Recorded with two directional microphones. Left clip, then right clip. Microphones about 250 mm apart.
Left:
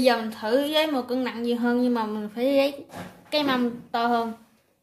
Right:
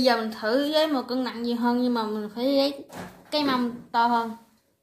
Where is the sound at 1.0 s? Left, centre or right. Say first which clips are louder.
Left 2 dB; left.